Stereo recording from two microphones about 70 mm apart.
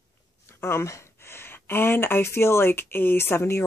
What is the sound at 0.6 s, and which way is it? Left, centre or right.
Speech, left.